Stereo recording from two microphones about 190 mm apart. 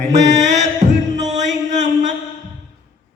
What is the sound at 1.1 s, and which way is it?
Music, 40° right (ahead or behind).